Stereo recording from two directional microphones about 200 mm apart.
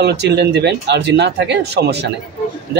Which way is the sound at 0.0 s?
55° right (ahead or behind).